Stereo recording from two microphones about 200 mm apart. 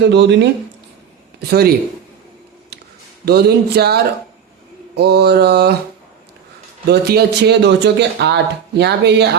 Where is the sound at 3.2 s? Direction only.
55° right (ahead or behind).